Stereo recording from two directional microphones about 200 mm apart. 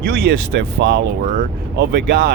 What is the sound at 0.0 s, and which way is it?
Speech, 55° right (ahead or behind).